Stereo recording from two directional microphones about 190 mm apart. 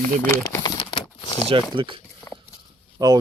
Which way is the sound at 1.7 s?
25° right (ahead or behind).